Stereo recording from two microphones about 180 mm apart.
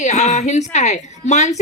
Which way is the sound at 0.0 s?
40° left (ahead or behind).